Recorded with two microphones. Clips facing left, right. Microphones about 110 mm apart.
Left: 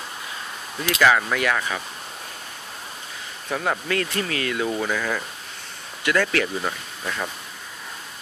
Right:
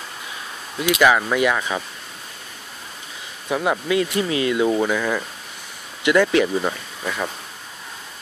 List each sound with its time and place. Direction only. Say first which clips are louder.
0.7 s speech: right 2 dB; 15° right (ahead or behind)
3.4 s speech: right 4 dB; 15° right (ahead or behind)
4.9 s speech: right 4 dB; 5° right (ahead or behind)
6.0 s speech: right 6 dB; 15° right (ahead or behind)